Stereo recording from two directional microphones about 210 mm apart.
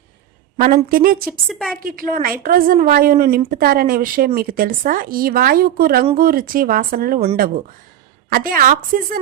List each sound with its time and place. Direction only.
0.9 s speech: 45° right (ahead or behind)
1.5 s a woman's voice: centre (ahead or behind)
1.8 s speech: 40° right (ahead or behind)
8.3 s speech: 45° right (ahead or behind)